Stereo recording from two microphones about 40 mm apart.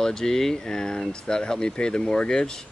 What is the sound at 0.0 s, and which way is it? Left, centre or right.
Speech, centre.